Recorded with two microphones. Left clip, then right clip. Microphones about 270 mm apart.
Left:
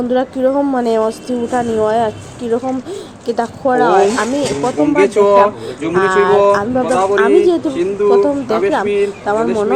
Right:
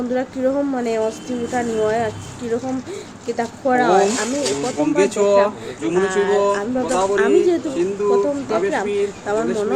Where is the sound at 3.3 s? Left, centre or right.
Centre.